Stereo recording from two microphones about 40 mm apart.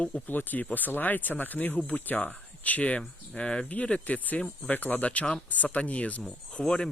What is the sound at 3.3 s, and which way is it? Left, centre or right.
Speech, left.